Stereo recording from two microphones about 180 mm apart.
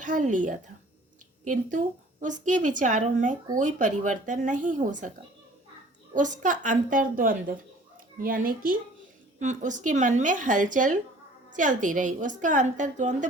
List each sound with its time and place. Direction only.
0.0 s a woman's voice: 45° right (ahead or behind)
2.2 s a woman's voice: 45° right (ahead or behind)
6.1 s a woman's voice: 45° right (ahead or behind)